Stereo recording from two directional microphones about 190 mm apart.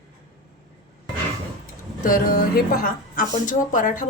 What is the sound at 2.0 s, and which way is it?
A woman's voice, 50° left (ahead or behind).